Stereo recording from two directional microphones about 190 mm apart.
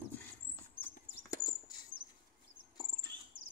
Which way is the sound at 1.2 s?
20° left (ahead or behind).